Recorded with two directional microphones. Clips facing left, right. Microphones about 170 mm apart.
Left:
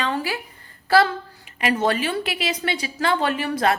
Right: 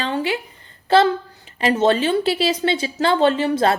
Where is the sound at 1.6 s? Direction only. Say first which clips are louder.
Right 5 dB; 25° right (ahead or behind).